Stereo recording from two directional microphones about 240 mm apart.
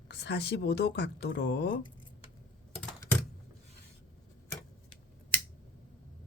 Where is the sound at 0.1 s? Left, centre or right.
Left.